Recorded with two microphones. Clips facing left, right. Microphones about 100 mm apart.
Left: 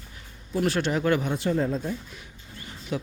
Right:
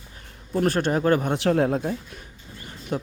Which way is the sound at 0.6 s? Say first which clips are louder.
Right 3 dB; 45° right (ahead or behind).